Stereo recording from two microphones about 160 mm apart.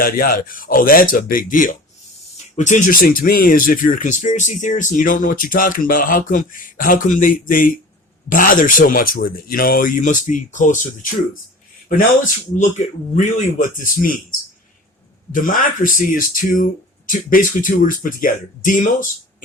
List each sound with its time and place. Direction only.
0.0 s speech: 65° left (ahead or behind)
15.3 s speech: 60° left (ahead or behind)